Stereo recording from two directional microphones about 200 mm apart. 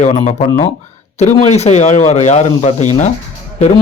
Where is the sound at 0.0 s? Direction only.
35° left (ahead or behind).